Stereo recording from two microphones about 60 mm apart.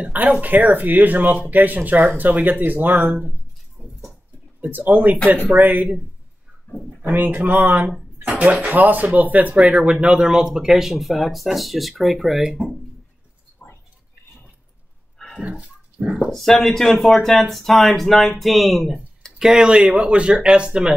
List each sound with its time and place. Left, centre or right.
0.1 s speech: right
3.8 s a sound: centre
4.6 s speech: right
6.7 s speech: left
7.2 s speech: right; by 12.6 s centre
13.6 s whispering: left
15.3 s dog: centre
16.3 s speech: centre